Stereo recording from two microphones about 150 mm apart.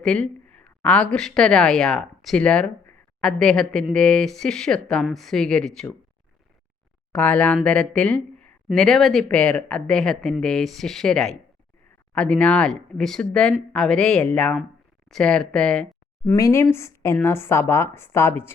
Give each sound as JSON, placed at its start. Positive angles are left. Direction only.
{"t": 0.0, "sound": "speech", "side_deg": 5}
{"t": 7.1, "sound": "speech", "side_deg": 5}
{"t": 16.3, "sound": "a woman's voice", "side_deg": 20}